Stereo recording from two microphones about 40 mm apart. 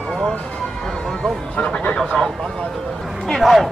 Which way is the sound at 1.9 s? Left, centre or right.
Centre.